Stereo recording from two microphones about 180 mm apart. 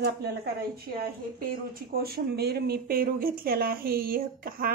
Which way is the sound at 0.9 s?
55° right (ahead or behind).